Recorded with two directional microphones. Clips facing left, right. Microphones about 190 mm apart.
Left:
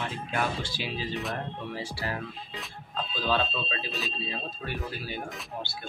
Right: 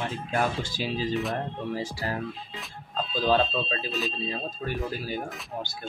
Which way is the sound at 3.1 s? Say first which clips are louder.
Right 5 dB; 45° right (ahead or behind).